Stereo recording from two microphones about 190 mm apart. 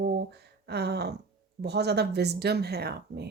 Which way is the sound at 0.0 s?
60° right (ahead or behind).